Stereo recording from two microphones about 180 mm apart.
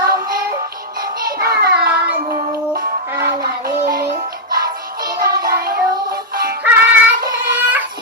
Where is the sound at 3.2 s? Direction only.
55° right (ahead or behind).